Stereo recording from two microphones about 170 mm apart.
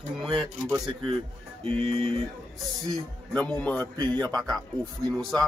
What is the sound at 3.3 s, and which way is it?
Speech, 10° left (ahead or behind).